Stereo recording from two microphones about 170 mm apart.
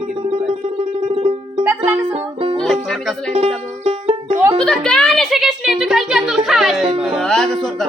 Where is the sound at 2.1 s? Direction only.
30° right (ahead or behind).